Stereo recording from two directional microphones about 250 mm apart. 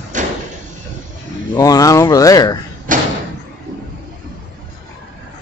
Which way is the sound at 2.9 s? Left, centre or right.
Right.